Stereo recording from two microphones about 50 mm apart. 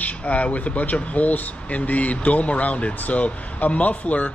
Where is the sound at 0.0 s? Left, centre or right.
Left.